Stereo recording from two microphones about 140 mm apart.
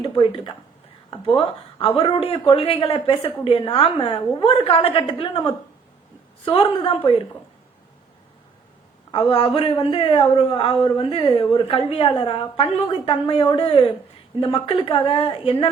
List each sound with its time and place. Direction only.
0.0 s a man's voice: 40° left (ahead or behind)
2.0 s a man's voice: 40° left (ahead or behind)
9.1 s a man's voice: 40° left (ahead or behind)